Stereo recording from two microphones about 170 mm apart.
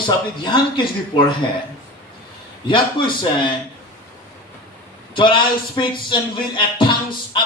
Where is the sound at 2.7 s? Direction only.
30° left (ahead or behind).